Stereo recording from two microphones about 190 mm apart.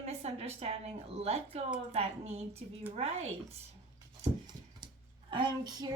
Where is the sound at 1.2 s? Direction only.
35° right (ahead or behind).